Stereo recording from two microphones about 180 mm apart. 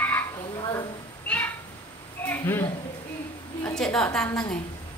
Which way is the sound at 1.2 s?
10° left (ahead or behind).